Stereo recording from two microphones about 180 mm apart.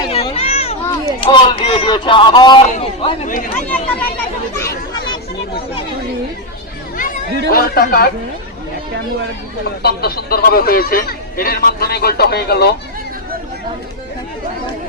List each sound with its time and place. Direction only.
0.0 s a sound: 30° left (ahead or behind)
1.2 s a man's voice: 25° left (ahead or behind)
3.2 s speech: 45° left (ahead or behind)
4.5 s chatter: 20° left (ahead or behind)
6.9 s speech: 50° left (ahead or behind)
9.6 s speech: 60° left (ahead or behind)